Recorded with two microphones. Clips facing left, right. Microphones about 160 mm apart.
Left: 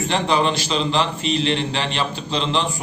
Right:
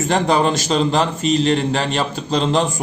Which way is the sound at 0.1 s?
45° right (ahead or behind).